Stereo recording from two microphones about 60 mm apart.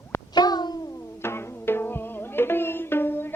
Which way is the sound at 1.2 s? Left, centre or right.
Left.